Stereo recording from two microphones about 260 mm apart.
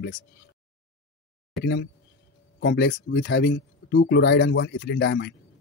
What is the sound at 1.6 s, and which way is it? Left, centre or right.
Speech, left.